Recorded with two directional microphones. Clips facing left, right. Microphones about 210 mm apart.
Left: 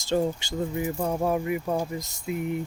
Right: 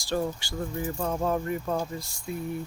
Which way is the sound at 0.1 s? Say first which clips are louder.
Left 4 dB; 20° left (ahead or behind).